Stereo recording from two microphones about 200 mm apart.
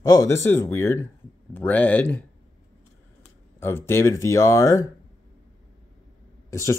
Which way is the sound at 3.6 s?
10° left (ahead or behind).